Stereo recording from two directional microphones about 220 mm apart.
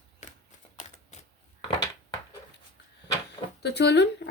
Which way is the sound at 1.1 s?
30° left (ahead or behind).